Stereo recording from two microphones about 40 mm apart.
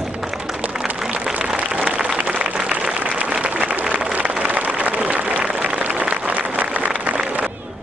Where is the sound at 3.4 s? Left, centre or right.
Right.